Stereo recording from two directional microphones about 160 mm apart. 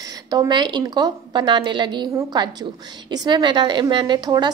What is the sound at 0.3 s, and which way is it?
A woman's voice, 25° right (ahead or behind).